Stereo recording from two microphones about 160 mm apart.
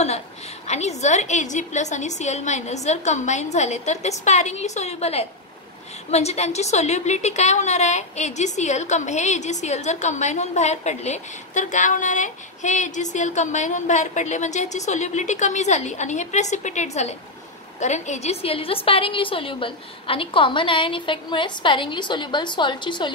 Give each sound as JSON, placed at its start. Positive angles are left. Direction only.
{"t": 0.7, "sound": "a woman's voice", "side_deg": 45}